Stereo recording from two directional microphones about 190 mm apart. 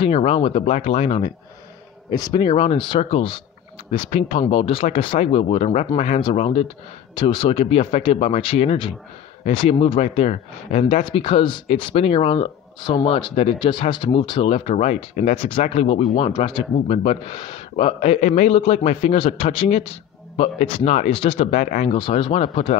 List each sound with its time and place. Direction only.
0.0 s speech: 30° left (ahead or behind)
2.0 s speech: 20° left (ahead or behind); by 21.9 s 40° left (ahead or behind)
21.9 s speech: 25° left (ahead or behind)